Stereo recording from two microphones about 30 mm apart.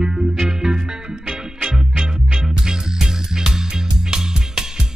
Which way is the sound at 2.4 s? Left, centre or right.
Centre.